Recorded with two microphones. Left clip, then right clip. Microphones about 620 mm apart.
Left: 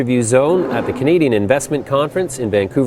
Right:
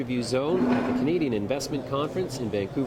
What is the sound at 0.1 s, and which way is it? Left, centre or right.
Speech, left.